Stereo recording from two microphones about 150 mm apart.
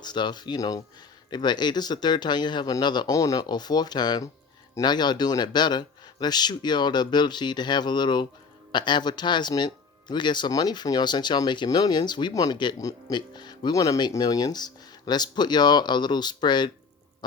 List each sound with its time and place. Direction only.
0.0 s speech: 30° left (ahead or behind)